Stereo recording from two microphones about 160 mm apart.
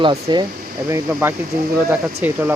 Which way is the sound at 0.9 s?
15° right (ahead or behind).